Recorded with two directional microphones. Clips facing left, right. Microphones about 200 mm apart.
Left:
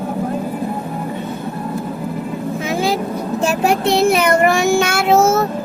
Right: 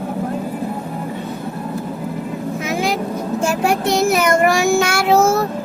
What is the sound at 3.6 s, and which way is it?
A child's voice, 25° left (ahead or behind).